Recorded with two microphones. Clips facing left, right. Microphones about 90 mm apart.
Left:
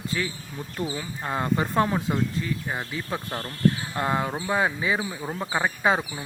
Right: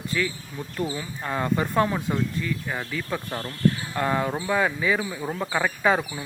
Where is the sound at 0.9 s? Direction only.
25° left (ahead or behind).